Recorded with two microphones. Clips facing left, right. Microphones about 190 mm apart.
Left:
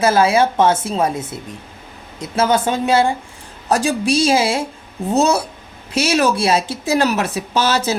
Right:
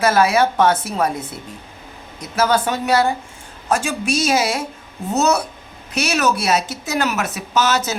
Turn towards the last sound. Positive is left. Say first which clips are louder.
# left 1 dB
turn(degrees=35)  # may be behind; listen again after turning